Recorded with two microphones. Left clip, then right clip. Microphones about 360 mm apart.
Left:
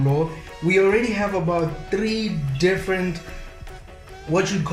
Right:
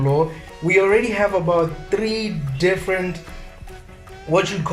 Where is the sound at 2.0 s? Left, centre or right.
Right.